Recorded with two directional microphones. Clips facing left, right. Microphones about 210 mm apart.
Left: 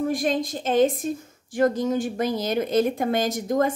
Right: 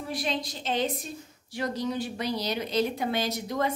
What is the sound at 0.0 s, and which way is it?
A woman's voice, 50° left (ahead or behind).